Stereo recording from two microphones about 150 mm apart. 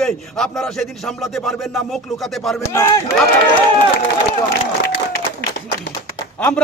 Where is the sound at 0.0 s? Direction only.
5° left (ahead or behind).